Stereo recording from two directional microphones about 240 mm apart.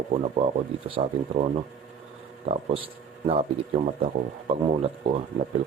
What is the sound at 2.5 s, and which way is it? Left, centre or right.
Speech, right.